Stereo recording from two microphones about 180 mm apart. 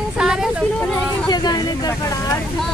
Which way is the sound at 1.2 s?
20° left (ahead or behind).